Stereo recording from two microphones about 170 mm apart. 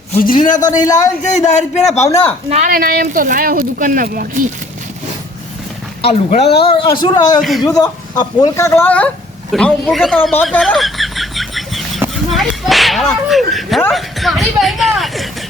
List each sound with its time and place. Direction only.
0.4 s speech: 50° left (ahead or behind)
0.9 s a woman's voice: 20° left (ahead or behind)
1.2 s speech: 45° left (ahead or behind)
2.0 s a woman's voice: 20° left (ahead or behind)
2.5 s speech: 50° right (ahead or behind)
6.0 s a woman's voice: 35° left (ahead or behind); by 10.2 s centre (ahead or behind)
10.4 s chicken: centre (ahead or behind)
12.1 s whip: centre (ahead or behind)
13.2 s a man's voice: centre (ahead or behind)
13.9 s a sound: centre (ahead or behind)